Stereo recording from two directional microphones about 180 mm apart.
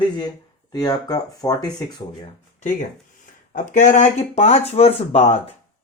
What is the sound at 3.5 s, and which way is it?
Speech, 45° left (ahead or behind).